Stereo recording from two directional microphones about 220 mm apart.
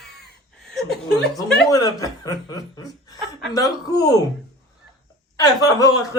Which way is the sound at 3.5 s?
15° left (ahead or behind).